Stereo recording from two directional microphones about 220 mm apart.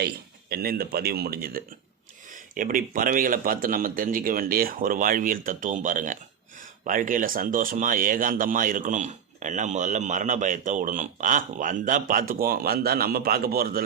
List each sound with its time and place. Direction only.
0.5 s speech: 45° right (ahead or behind)